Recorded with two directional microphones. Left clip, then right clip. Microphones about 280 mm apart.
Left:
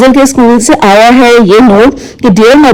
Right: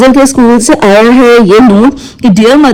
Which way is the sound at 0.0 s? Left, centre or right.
Centre.